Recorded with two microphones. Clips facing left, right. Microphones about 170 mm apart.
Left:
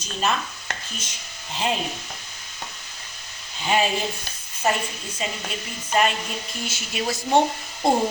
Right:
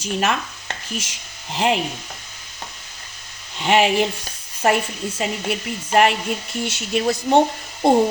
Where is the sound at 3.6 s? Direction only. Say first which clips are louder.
Right 6 dB; 70° right (ahead or behind).